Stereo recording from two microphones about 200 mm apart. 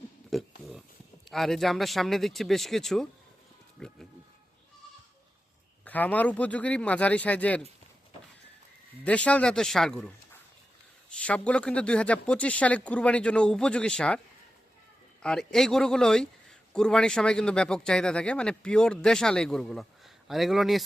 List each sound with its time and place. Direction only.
0.3 s oink: centre (ahead or behind)
1.3 s a man's voice: centre (ahead or behind)
5.8 s speech: 10° left (ahead or behind)
9.0 s a man's voice: 5° left (ahead or behind)
11.1 s a man's voice: 5° left (ahead or behind)
15.2 s a man's voice: 5° left (ahead or behind)